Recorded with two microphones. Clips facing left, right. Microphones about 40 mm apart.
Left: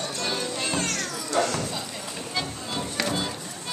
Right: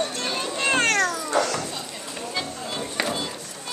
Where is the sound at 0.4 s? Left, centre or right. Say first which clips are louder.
Right 5 dB; right.